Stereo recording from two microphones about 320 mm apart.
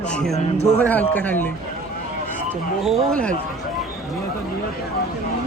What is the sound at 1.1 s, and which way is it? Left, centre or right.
Speech, centre.